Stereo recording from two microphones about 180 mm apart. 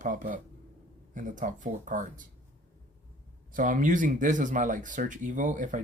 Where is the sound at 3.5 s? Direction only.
45° right (ahead or behind).